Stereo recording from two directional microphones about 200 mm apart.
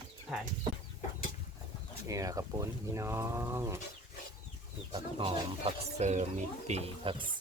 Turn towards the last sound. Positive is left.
turn(degrees=-30)  # may be behind; listen again after turning